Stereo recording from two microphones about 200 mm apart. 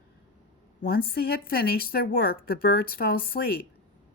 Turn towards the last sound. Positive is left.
turn(degrees=50)  # may be behind; listen again after turning